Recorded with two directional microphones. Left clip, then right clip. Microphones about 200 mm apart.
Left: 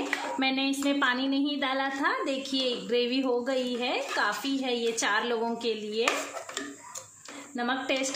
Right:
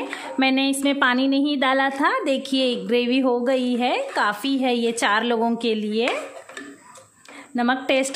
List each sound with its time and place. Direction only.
0.4 s a woman's voice: 45° right (ahead or behind)
7.5 s a woman's voice: 45° right (ahead or behind)